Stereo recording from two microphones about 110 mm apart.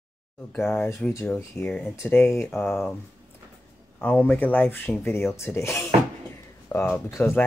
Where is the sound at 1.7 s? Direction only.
10° left (ahead or behind).